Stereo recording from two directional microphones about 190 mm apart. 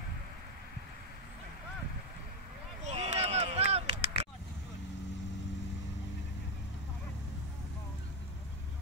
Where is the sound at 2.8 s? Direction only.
35° right (ahead or behind).